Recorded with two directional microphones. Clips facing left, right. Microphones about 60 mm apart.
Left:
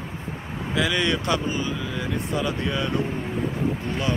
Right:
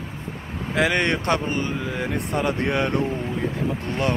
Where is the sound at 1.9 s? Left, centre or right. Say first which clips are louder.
Right 2 dB; right.